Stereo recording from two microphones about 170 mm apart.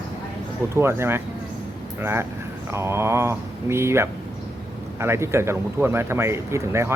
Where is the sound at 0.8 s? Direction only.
15° right (ahead or behind).